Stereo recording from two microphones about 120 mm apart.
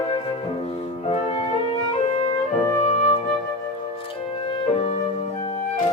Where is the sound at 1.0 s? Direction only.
55° left (ahead or behind).